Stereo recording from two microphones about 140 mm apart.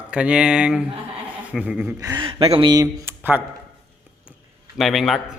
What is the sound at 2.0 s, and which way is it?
Speech, 35° right (ahead or behind).